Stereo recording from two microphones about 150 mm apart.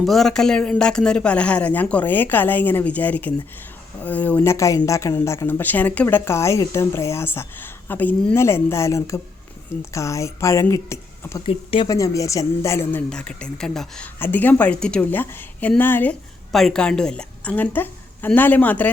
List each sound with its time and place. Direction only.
0.0 s a woman's voice: centre (ahead or behind); by 11.4 s 20° left (ahead or behind)
11.4 s speech: 40° left (ahead or behind)
11.9 s a woman's voice: 20° left (ahead or behind)
16.5 s a woman's voice: centre (ahead or behind)